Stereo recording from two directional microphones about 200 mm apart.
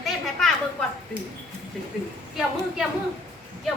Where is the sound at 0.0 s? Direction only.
Centre (ahead or behind).